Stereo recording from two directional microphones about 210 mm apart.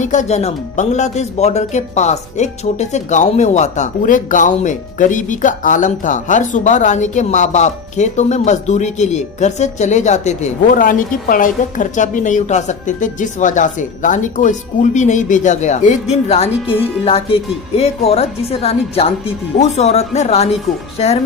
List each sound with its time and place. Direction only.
0.0 s a woman's voice: 35° left (ahead or behind)